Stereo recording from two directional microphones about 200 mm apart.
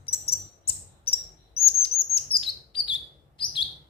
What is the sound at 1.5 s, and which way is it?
Chirp, 30° left (ahead or behind).